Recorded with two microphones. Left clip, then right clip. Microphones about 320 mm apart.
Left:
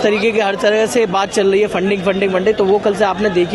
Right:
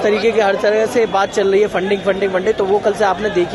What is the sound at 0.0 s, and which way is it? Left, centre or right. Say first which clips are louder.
Speech: even; left.